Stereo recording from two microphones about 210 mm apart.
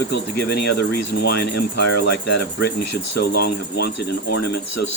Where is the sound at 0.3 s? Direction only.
50° left (ahead or behind).